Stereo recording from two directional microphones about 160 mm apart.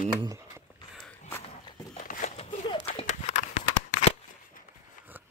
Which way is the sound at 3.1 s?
45° left (ahead or behind).